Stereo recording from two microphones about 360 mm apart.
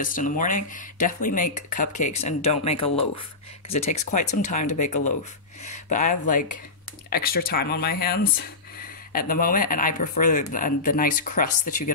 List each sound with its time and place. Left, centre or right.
0.0 s speech: left
9.1 s speech: left